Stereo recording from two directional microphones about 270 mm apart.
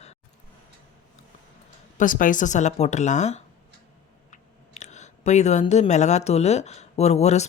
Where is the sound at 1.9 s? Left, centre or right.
Left.